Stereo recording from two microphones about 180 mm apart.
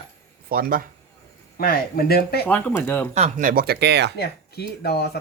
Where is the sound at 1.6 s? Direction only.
55° left (ahead or behind).